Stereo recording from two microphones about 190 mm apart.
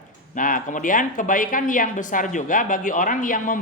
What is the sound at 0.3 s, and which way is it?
Speech, 45° left (ahead or behind).